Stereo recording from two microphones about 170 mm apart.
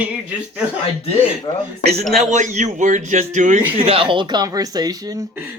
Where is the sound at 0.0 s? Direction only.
5° right (ahead or behind).